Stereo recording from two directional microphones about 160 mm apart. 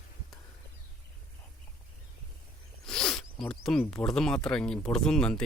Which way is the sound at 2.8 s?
5° left (ahead or behind).